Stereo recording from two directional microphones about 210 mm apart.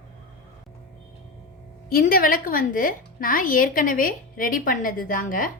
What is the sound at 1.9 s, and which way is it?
A woman's voice, 40° left (ahead or behind).